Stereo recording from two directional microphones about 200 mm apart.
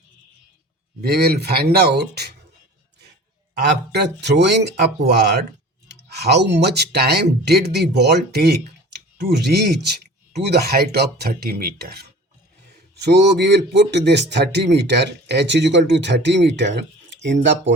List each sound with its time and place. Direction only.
1.0 s speech: 50° right (ahead or behind)
3.9 s a man's voice: 55° right (ahead or behind)